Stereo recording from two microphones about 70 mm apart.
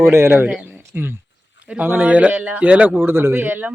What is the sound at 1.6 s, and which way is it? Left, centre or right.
Speech, centre.